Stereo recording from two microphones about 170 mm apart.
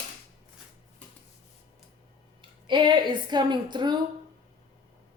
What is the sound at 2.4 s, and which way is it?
A woman's voice, 30° right (ahead or behind).